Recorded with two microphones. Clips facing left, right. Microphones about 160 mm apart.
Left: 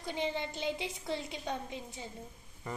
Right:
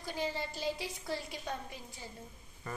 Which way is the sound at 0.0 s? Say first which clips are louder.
Left 2 dB; 20° left (ahead or behind).